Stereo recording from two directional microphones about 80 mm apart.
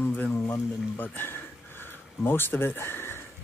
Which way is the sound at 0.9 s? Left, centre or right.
Left.